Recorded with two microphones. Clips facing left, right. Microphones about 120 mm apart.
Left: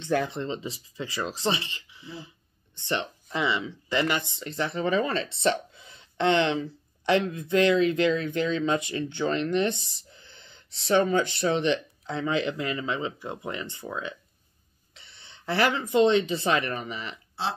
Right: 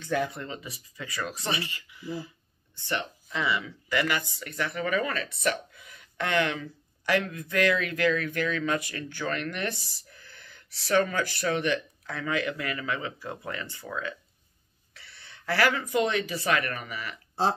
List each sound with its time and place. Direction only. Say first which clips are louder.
0.2 s speech: left 2 dB; 25° left (ahead or behind)